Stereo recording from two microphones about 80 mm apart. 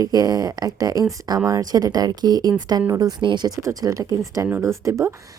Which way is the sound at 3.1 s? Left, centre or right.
Right.